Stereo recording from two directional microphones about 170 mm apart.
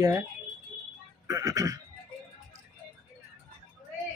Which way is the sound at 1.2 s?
20° right (ahead or behind).